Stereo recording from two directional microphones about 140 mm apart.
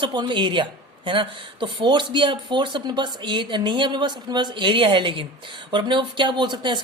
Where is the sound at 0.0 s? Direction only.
35° right (ahead or behind).